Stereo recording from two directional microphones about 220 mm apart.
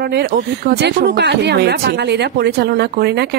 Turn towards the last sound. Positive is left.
turn(degrees=-50)  # may be behind; listen again after turning